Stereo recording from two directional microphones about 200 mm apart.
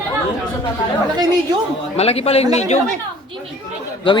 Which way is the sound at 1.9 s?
30° left (ahead or behind).